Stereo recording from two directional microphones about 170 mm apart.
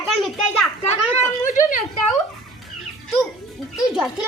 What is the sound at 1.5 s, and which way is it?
Speech, 50° left (ahead or behind).